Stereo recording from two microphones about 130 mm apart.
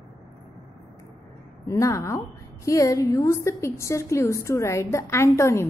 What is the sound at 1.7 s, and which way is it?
A woman's voice, 25° left (ahead or behind).